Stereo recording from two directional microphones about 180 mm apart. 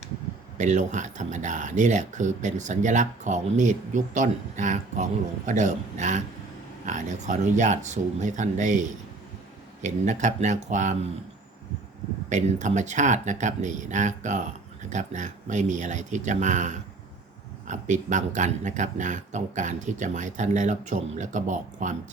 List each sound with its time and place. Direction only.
0.5 s speech: 40° right (ahead or behind)
12.3 s speech: 40° right (ahead or behind)